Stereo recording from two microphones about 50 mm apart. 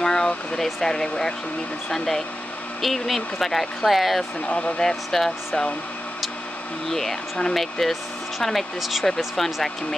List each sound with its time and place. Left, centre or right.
0.0 s a sound: centre
0.6 s speech: centre
4.5 s speech: left
4.8 s speech: centre
6.9 s speech: centre